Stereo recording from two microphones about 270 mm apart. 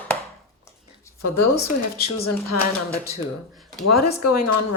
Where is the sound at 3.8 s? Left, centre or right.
Left.